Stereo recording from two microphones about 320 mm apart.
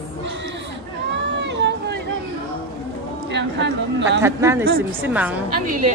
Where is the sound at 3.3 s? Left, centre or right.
Right.